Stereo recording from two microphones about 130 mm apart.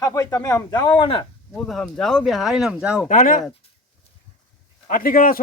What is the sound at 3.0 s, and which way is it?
Speech, 85° left.